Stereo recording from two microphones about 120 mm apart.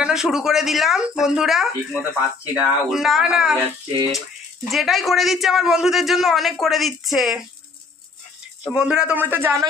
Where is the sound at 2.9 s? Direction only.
5° right (ahead or behind).